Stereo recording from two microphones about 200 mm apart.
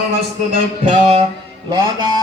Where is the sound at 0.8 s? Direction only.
30° right (ahead or behind).